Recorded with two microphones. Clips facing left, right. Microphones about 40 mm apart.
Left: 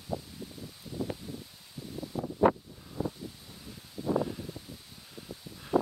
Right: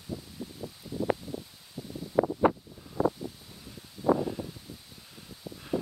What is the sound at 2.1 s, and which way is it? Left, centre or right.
Wind noise, right.